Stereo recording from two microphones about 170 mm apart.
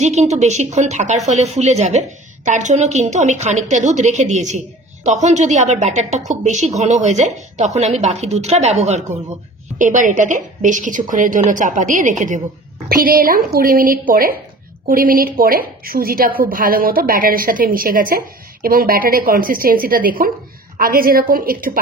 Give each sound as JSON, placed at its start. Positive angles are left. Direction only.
{"t": 0.0, "sound": "speech", "side_deg": -40}
{"t": 12.8, "sound": "a woman's voice", "side_deg": -60}